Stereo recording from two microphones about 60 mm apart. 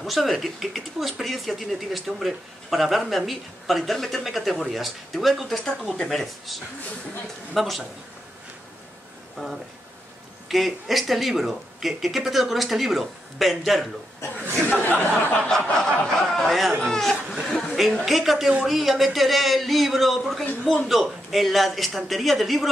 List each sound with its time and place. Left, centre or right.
0.0 s speech: centre
5.7 s snicker: centre
6.0 s speech: centre
10.5 s speech: centre
14.5 s speech: left
15.4 s snicker: centre
16.3 s speech: centre
16.8 s snicker: centre
17.5 s speech: centre